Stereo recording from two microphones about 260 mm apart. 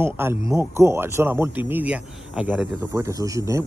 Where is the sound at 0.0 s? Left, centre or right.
Centre.